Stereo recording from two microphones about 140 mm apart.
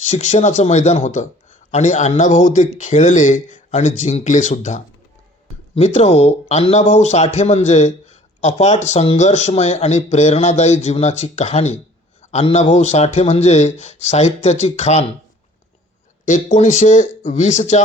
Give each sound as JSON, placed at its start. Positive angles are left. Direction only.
{"t": 0.0, "sound": "speech", "side_deg": 55}
{"t": 16.2, "sound": "speech", "side_deg": 60}